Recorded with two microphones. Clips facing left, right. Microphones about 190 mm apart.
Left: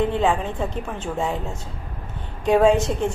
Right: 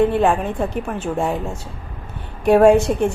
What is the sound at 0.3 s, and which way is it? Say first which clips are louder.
Speech: right 3 dB; 10° right (ahead or behind).